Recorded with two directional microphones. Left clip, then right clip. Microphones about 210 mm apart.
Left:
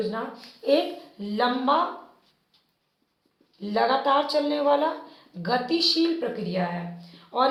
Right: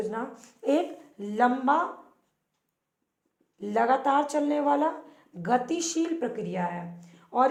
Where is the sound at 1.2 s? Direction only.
50° right (ahead or behind).